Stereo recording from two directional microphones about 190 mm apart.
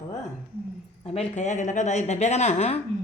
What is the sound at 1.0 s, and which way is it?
A woman's voice, 35° left (ahead or behind).